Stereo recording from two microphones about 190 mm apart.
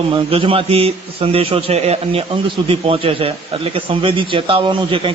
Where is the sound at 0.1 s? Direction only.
30° right (ahead or behind).